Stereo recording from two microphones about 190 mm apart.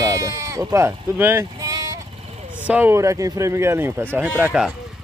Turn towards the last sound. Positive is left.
turn(degrees=-5)  # may be behind; listen again after turning